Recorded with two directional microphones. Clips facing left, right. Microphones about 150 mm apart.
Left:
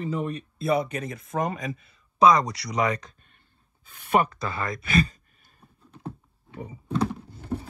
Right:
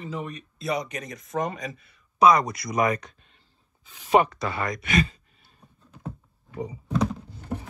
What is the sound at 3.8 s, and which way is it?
Speech, 55° left (ahead or behind).